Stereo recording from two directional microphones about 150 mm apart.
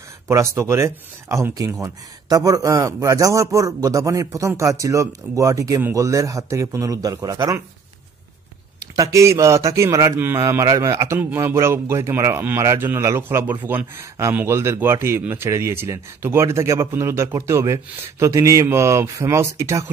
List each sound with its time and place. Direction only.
0.3 s speech: 20° right (ahead or behind)
8.9 s a man's voice: 20° right (ahead or behind)